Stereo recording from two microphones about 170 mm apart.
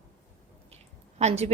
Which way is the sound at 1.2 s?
40° right (ahead or behind).